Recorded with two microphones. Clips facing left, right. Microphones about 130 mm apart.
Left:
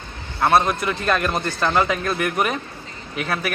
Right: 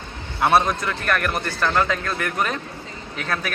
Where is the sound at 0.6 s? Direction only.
5° left (ahead or behind).